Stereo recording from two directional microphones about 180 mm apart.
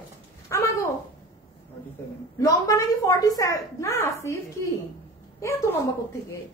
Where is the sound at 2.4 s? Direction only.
15° left (ahead or behind).